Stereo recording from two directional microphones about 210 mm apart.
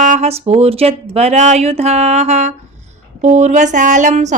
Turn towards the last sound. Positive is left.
turn(degrees=-35)  # may be behind; listen again after turning